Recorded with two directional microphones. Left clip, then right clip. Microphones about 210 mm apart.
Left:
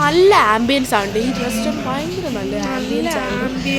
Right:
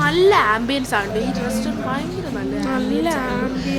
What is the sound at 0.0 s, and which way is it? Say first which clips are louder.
Speech: left 3 dB; 15° left (ahead or behind).